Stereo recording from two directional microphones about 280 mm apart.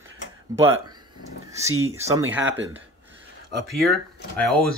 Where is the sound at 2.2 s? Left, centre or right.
Right.